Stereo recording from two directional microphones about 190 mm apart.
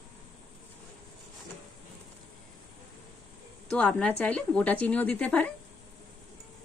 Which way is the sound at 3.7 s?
5° left (ahead or behind).